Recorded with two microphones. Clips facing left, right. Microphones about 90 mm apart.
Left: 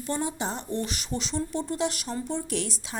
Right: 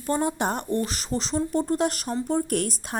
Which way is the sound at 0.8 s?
40° right (ahead or behind).